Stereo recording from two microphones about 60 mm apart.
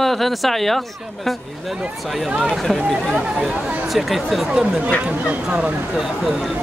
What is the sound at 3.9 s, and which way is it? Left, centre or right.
Speech, centre.